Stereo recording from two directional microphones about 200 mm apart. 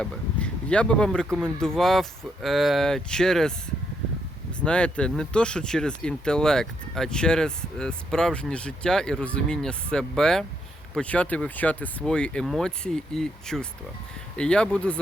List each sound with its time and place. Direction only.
0.0 s speech: 5° left (ahead or behind)
4.6 s speech: 5° left (ahead or behind)